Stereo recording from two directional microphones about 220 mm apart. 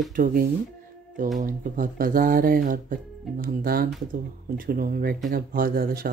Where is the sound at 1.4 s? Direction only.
40° right (ahead or behind).